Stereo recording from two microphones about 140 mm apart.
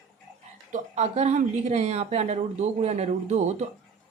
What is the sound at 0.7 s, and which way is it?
Speech, 50° right (ahead or behind).